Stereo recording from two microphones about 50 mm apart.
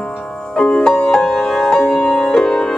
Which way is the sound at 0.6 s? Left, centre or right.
Centre.